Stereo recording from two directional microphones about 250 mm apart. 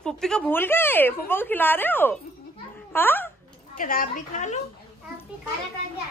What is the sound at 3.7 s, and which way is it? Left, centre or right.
Speech, left.